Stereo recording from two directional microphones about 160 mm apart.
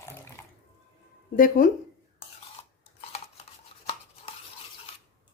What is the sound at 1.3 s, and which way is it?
Speech, 60° left (ahead or behind).